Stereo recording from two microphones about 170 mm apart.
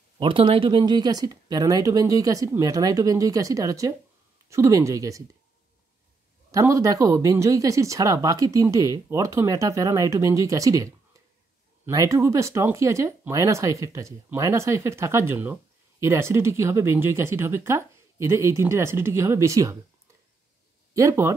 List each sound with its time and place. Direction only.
0.2 s speech: 30° right (ahead or behind)
6.5 s speech: 20° right (ahead or behind)
20.9 s speech: 20° right (ahead or behind)